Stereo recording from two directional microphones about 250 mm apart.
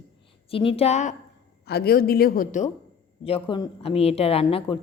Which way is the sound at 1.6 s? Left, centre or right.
Left.